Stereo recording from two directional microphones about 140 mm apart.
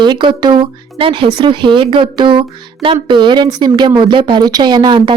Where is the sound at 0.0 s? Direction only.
35° right (ahead or behind).